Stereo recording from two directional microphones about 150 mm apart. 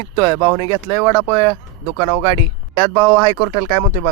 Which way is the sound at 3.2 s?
30° right (ahead or behind).